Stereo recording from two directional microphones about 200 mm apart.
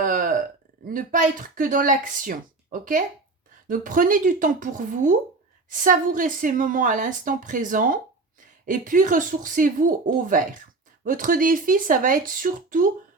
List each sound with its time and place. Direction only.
0.0 s burping: 40° right (ahead or behind)
0.9 s a woman's voice: 45° right (ahead or behind)